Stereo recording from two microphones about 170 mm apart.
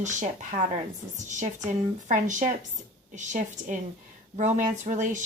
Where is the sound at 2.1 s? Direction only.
45° right (ahead or behind).